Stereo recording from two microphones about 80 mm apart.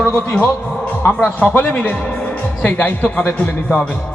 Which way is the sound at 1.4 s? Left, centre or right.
Centre.